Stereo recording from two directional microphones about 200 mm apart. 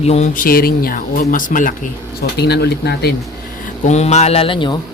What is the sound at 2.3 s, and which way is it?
Speech, 55° left (ahead or behind).